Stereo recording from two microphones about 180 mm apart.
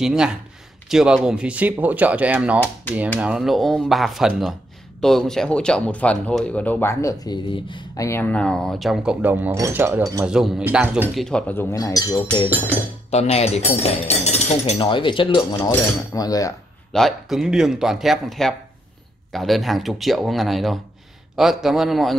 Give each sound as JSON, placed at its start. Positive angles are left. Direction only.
{"t": 0.0, "sound": "speech", "side_deg": -5}
{"t": 10.2, "sound": "speech", "side_deg": -5}
{"t": 11.2, "sound": "speech", "side_deg": 5}
{"t": 13.1, "sound": "speech", "side_deg": 35}
{"t": 16.9, "sound": "speech", "side_deg": 0}